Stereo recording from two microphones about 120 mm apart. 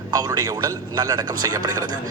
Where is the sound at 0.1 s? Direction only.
30° right (ahead or behind).